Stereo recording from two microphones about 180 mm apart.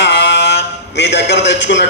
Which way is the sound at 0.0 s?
70° left (ahead or behind).